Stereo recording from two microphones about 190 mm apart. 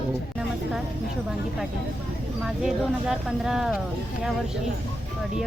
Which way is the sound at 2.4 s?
Centre (ahead or behind).